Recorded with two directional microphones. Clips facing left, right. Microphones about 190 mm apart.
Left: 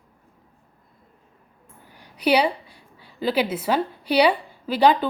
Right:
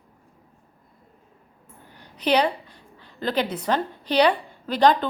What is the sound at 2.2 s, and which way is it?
A woman's voice, 10° left (ahead or behind).